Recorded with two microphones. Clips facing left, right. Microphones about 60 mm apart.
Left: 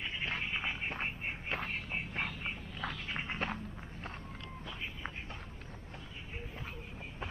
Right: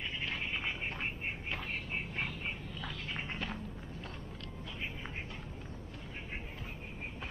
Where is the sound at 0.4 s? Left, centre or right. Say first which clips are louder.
Left 1 dB; centre.